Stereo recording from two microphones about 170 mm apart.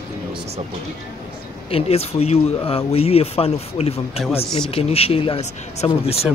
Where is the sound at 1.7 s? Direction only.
35° left (ahead or behind).